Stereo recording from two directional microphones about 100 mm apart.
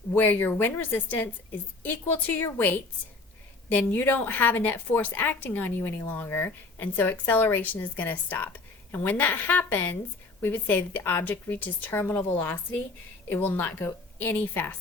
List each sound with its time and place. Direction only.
0.1 s a woman's voice: 20° left (ahead or behind)